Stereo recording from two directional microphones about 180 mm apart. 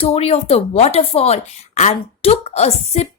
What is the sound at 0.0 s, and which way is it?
Speech, 35° left (ahead or behind).